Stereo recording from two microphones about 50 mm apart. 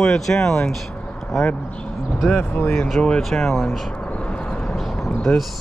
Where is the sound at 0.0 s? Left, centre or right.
Centre.